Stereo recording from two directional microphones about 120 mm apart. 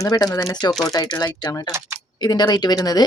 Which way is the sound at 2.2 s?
35° left (ahead or behind).